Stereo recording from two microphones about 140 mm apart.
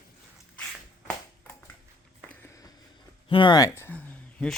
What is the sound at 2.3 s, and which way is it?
Walk, 20° left (ahead or behind).